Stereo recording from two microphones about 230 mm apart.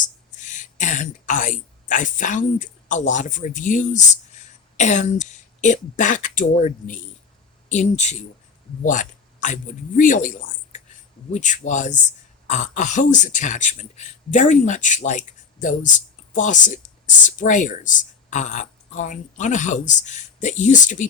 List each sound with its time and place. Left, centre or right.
0.0 s speech: left